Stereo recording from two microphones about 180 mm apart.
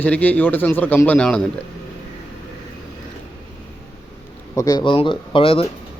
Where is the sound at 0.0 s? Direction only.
10° left (ahead or behind).